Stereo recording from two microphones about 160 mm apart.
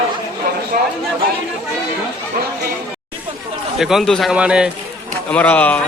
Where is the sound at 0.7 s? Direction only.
60° right (ahead or behind).